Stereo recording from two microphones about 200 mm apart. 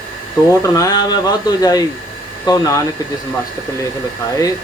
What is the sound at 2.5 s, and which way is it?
Speech, 15° left (ahead or behind).